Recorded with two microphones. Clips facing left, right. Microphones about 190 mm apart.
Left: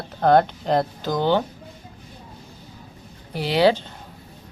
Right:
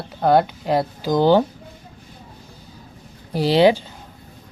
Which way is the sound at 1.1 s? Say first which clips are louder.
Right 6 dB; 35° right (ahead or behind).